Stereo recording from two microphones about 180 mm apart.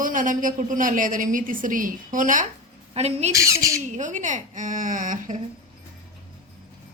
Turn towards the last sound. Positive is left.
turn(degrees=-45)  # may be behind; listen again after turning